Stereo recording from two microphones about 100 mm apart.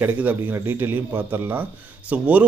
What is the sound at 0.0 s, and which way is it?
A man's voice, 20° right (ahead or behind).